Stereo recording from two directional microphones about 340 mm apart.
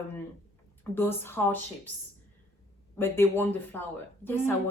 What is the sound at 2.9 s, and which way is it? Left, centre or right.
Speech, centre.